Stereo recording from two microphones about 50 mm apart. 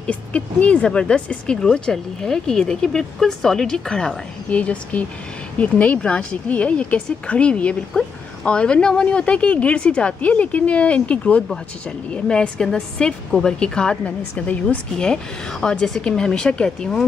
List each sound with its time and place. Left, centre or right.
0.0 s speech: left
4.5 s speech: left
15.6 s speech: centre